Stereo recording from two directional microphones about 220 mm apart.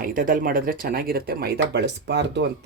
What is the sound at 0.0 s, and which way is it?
Speech, 40° right (ahead or behind).